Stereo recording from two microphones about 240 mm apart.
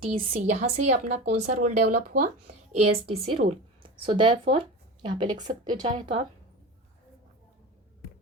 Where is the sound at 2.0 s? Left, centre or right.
Right.